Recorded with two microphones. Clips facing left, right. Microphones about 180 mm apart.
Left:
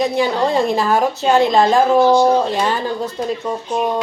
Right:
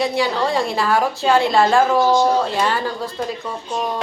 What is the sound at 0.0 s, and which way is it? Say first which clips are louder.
A woman's voice: left 3 dB; 20° left (ahead or behind).